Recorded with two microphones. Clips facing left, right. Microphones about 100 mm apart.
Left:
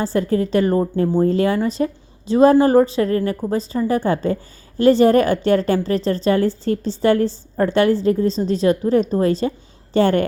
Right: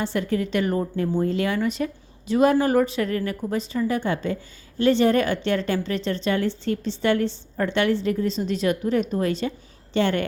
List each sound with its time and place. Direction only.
0.0 s a woman's voice: 35° left (ahead or behind)